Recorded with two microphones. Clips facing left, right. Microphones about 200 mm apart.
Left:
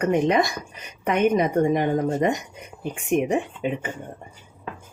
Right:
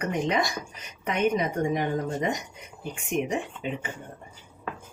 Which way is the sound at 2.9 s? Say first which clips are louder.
Left 6 dB; 55° left (ahead or behind).